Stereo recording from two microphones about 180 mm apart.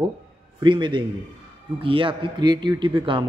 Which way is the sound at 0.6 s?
25° right (ahead or behind).